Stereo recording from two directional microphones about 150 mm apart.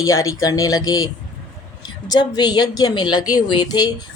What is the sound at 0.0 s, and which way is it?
A woman's voice, 20° left (ahead or behind).